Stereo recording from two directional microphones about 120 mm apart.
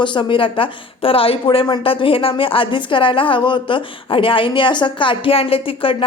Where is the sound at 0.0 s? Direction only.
40° left (ahead or behind).